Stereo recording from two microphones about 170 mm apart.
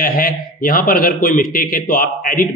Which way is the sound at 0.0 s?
55° left (ahead or behind).